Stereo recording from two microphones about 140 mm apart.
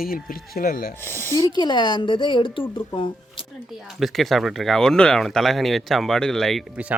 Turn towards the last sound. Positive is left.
turn(degrees=-5)  # may be behind; listen again after turning